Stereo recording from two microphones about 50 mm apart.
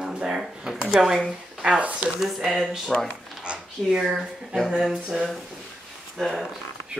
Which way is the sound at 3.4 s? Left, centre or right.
Right.